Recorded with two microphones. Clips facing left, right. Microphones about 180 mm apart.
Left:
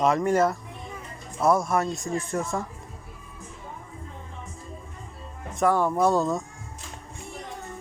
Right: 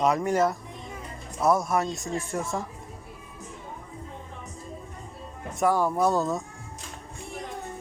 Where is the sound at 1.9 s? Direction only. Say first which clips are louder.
Left 2 dB; 25° right (ahead or behind).